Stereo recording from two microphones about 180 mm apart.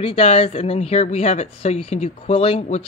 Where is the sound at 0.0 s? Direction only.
35° left (ahead or behind).